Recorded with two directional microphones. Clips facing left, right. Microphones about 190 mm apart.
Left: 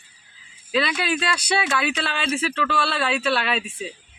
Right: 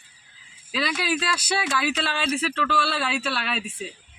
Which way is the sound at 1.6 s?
60° left (ahead or behind).